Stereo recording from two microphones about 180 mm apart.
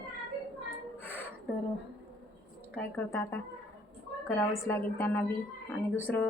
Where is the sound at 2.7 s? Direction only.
10° left (ahead or behind).